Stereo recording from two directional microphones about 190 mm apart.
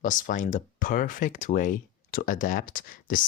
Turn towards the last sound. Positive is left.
turn(degrees=45)  # may be behind; listen again after turning